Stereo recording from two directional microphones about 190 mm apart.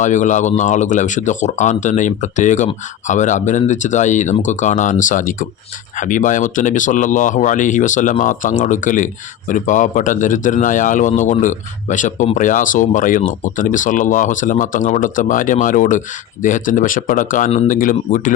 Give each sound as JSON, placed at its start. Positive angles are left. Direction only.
{"t": 0.0, "sound": "a man's voice", "side_deg": 40}